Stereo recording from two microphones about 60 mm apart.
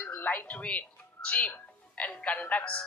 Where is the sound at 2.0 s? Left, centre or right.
Left.